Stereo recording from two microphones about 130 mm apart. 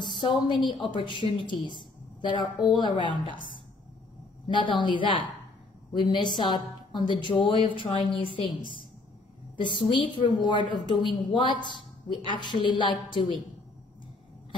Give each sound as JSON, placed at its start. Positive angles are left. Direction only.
{"t": 0.2, "sound": "a woman's voice", "side_deg": 40}